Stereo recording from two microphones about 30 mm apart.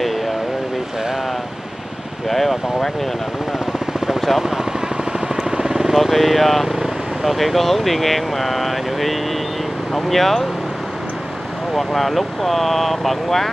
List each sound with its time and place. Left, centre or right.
2.2 s vehicle: centre
5.5 s vehicle: centre
5.9 s speech: centre
11.7 s speech: centre